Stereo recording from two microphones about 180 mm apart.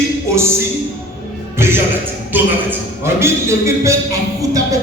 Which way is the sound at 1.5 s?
15° right (ahead or behind).